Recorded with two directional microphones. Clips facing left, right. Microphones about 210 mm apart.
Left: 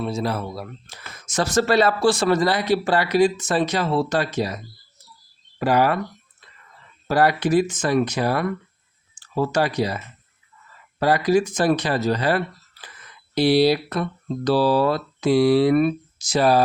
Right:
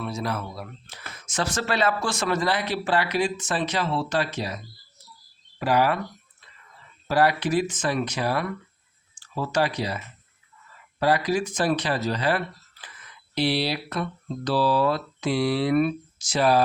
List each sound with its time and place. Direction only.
0.0 s speech: 30° left (ahead or behind); by 6.0 s 50° left (ahead or behind)
7.1 s speech: 45° left (ahead or behind)
11.0 s speech: 45° left (ahead or behind)